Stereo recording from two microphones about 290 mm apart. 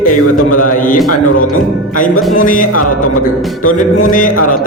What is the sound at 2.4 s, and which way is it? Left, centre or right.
Speech, left.